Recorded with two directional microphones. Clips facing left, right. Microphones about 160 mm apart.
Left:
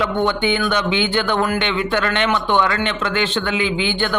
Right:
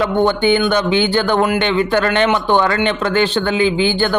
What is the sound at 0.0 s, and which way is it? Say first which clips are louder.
Speech: right 4 dB; 40° right (ahead or behind).